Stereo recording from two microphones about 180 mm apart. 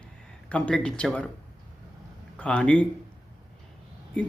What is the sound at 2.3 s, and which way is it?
Speech, 5° left (ahead or behind).